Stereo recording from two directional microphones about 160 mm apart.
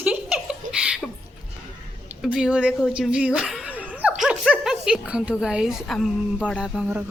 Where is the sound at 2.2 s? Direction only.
5° right (ahead or behind).